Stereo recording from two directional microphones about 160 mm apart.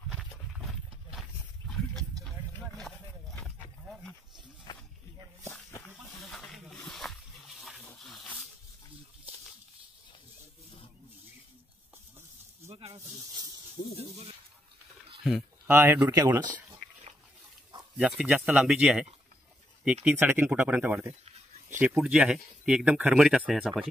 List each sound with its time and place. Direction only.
0.1 s pig: centre (ahead or behind)
1.7 s a sound: centre (ahead or behind)
4.7 s snake: 25° left (ahead or behind)
5.7 s goat: 20° left (ahead or behind)
6.3 s a sound: centre (ahead or behind)
12.6 s snake: 40° right (ahead or behind)
15.6 s speech: 15° right (ahead or behind)
17.9 s speech: 5° right (ahead or behind)
20.1 s speech: 10° right (ahead or behind)